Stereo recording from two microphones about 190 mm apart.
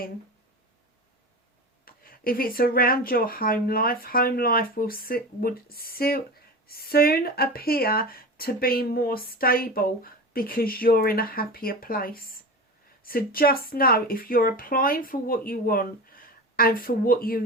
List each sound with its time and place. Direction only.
1.8 s speech: 50° left (ahead or behind)